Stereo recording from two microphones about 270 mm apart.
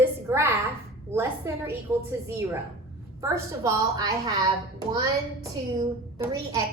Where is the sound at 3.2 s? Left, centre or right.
Centre.